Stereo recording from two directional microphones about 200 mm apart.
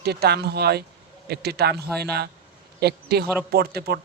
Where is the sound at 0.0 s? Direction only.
55° right (ahead or behind).